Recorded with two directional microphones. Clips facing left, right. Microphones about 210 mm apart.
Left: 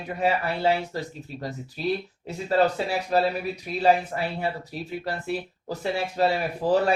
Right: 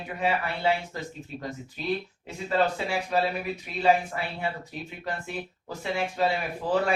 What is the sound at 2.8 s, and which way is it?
Speech, 40° left (ahead or behind).